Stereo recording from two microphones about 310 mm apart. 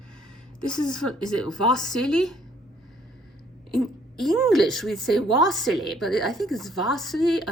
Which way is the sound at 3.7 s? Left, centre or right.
Centre.